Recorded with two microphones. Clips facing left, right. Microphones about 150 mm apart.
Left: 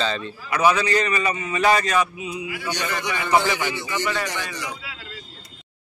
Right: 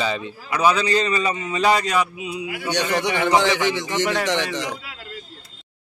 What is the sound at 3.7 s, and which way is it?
A man's voice, 80° right.